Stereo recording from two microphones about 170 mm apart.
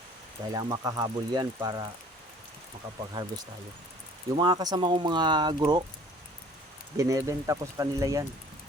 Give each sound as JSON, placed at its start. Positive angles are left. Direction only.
{"t": 0.5, "sound": "speech", "side_deg": -20}
{"t": 4.4, "sound": "speech", "side_deg": -25}
{"t": 6.9, "sound": "speech", "side_deg": -20}